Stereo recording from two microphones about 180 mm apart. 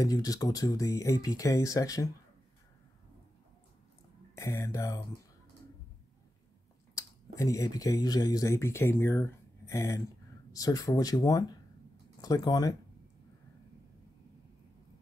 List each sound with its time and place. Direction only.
0.0 s speech: 20° left (ahead or behind)
4.4 s speech: 15° left (ahead or behind)
7.0 s speech: 20° left (ahead or behind)